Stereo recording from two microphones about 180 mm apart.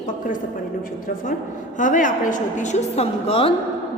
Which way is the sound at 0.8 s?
50° left (ahead or behind).